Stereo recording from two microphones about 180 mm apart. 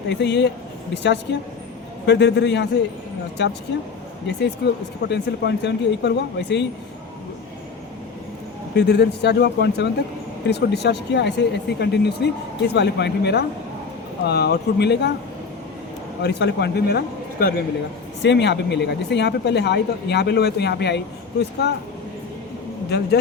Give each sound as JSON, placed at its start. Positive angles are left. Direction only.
{"t": 0.1, "sound": "speech", "side_deg": 75}
{"t": 8.7, "sound": "speech", "side_deg": 70}
{"t": 16.2, "sound": "speech", "side_deg": 65}
{"t": 18.2, "sound": "speech", "side_deg": 75}
{"t": 22.9, "sound": "speech", "side_deg": 65}